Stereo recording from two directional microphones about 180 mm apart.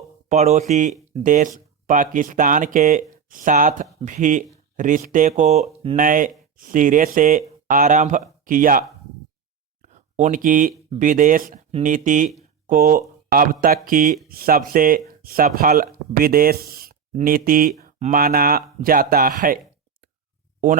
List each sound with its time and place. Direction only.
0.3 s speech: 40° right (ahead or behind)
9.8 s a sound: 40° right (ahead or behind)
10.9 s speech: 50° right (ahead or behind)